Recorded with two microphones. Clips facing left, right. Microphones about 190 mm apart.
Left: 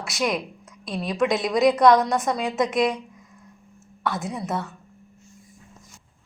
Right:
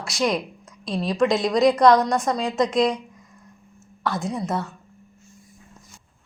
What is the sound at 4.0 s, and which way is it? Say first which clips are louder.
Speech: right 2 dB; centre (ahead or behind).